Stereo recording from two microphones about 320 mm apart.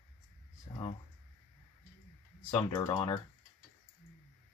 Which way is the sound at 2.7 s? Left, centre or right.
Centre.